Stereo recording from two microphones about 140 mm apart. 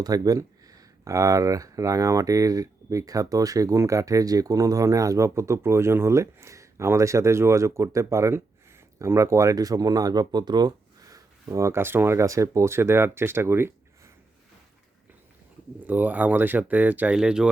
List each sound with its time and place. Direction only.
0.0 s speech: 25° right (ahead or behind)
15.9 s speech: 10° right (ahead or behind)